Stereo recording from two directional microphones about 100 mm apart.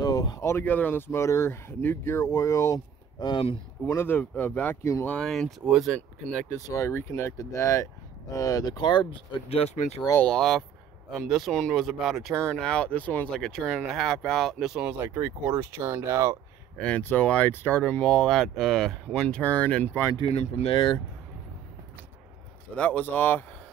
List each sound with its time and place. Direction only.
0.0 s speech: 35° left (ahead or behind)
3.2 s speech: 50° left (ahead or behind)
3.8 s speech: 25° left (ahead or behind); by 6.4 s 10° left (ahead or behind)
6.7 s speech: 25° left (ahead or behind); by 9.2 s 50° left (ahead or behind)
9.5 s speech: 85° left
10.2 s speech: 5° left (ahead or behind)
13.3 s speech: 5° left (ahead or behind)
14.9 s speech: 25° right (ahead or behind)
16.7 s speech: 10° left (ahead or behind)
20.2 s speech: 90° left
20.7 s speech: 50° left (ahead or behind)
22.8 s speech: 15° left (ahead or behind)